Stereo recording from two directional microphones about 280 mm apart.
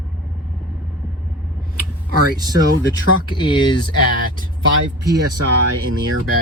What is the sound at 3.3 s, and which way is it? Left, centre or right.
Speech, centre.